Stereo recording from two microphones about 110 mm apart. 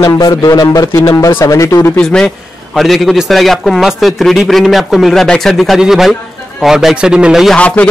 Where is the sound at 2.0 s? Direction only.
5° left (ahead or behind).